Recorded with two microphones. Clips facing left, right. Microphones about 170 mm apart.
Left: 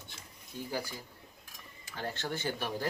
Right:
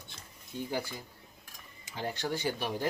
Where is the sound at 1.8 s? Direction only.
15° right (ahead or behind).